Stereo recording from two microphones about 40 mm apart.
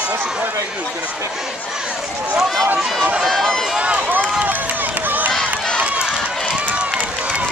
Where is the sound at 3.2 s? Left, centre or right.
Centre.